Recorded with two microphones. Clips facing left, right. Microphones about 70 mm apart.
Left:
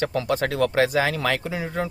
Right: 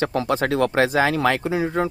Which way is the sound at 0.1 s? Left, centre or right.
Right.